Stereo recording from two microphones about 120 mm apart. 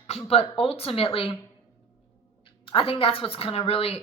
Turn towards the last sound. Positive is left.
turn(degrees=50)  # may be behind; listen again after turning